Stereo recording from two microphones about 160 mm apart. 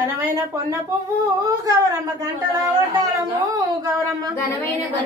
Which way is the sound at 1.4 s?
20° right (ahead or behind).